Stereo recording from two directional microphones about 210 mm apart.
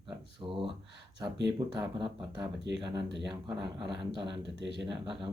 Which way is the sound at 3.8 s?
20° right (ahead or behind).